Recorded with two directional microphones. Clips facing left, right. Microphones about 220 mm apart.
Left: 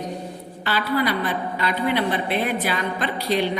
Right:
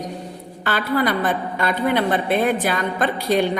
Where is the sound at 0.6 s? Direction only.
50° right (ahead or behind).